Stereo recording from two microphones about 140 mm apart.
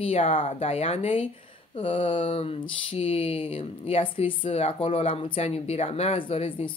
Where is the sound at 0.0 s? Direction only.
45° left (ahead or behind).